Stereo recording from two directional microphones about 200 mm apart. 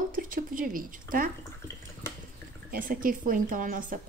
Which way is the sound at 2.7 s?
45° right (ahead or behind).